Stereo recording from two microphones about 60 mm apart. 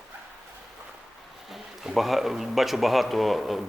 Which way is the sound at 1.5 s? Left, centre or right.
Centre.